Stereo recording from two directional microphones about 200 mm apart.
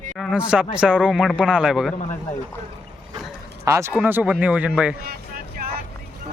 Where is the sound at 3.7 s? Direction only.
15° right (ahead or behind).